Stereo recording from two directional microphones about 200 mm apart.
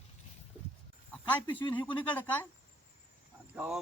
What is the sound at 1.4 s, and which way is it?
Speech, 25° left (ahead or behind).